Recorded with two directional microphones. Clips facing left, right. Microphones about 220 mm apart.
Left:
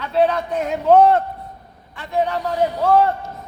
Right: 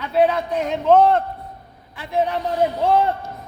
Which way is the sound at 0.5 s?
5° left (ahead or behind).